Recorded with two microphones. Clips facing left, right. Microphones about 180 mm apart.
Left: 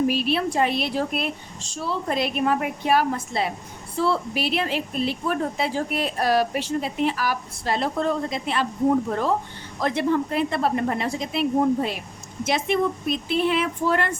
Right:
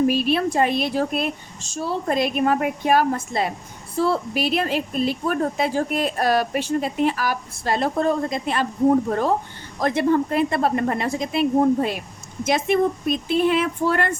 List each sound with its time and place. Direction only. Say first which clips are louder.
0.1 s a woman's voice: right 3 dB; 50° right (ahead or behind)
9.8 s a woman's voice: right 3 dB; 50° right (ahead or behind)